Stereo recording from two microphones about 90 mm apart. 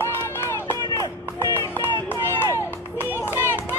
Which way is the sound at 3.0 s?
25° left (ahead or behind).